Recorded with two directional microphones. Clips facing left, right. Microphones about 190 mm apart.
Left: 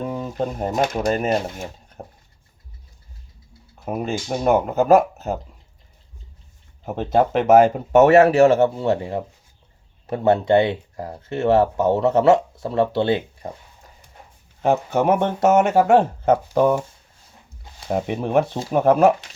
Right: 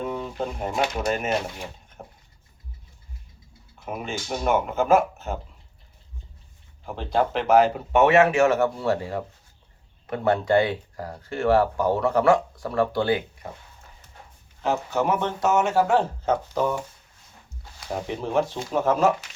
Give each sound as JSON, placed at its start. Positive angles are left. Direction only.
{"t": 0.1, "sound": "speech", "side_deg": 40}
{"t": 3.8, "sound": "speech", "side_deg": 35}
{"t": 6.8, "sound": "speech", "side_deg": 50}
{"t": 14.6, "sound": "speech", "side_deg": 55}
{"t": 17.9, "sound": "speech", "side_deg": 55}